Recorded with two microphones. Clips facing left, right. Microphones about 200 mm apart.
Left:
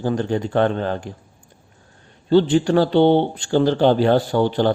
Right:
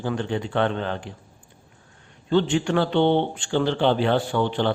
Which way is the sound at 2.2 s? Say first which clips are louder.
Left 6 dB; 35° left (ahead or behind).